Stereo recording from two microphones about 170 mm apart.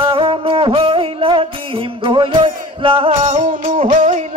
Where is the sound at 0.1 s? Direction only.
30° right (ahead or behind).